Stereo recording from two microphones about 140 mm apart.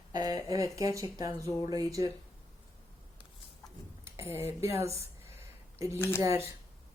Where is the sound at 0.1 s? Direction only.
25° right (ahead or behind).